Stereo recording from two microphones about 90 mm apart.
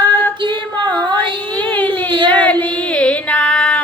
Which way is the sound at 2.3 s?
15° left (ahead or behind).